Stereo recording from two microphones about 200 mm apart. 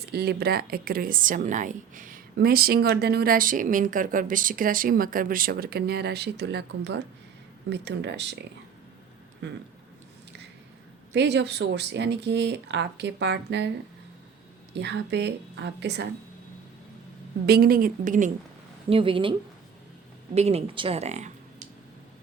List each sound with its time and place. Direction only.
0.1 s a woman's voice: 55° right (ahead or behind)
11.1 s speech: 60° right (ahead or behind)
14.8 s speech: 60° right (ahead or behind)
17.4 s a woman's voice: 50° right (ahead or behind)
18.9 s a woman's voice: 25° right (ahead or behind)